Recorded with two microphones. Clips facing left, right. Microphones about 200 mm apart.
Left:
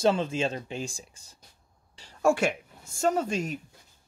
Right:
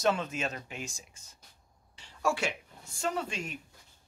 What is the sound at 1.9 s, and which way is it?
Speech, 45° left (ahead or behind).